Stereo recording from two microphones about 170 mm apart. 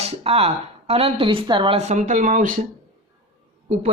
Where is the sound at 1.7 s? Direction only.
40° right (ahead or behind).